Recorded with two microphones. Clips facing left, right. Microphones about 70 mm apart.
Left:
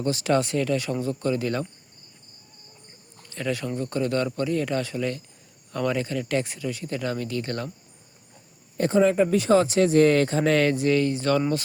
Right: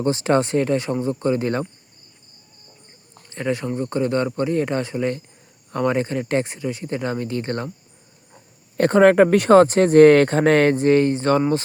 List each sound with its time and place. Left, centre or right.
0.0 s speech: right
3.2 s speech: right
8.8 s speech: right